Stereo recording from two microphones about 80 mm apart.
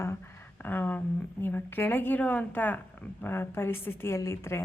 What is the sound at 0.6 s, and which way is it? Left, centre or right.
A woman's voice, left.